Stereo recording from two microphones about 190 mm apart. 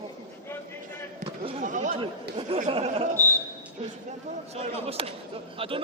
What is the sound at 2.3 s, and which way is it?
Speech, 30° right (ahead or behind).